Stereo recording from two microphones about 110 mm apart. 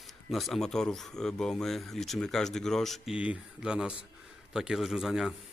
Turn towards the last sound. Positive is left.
turn(degrees=-5)  # may be behind; listen again after turning